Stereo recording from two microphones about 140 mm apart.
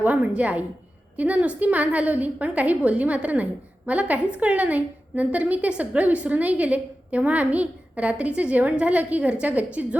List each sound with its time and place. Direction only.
0.0 s a woman's voice: 10° right (ahead or behind)